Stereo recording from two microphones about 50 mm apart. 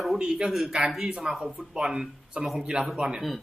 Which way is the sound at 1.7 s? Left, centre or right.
Centre.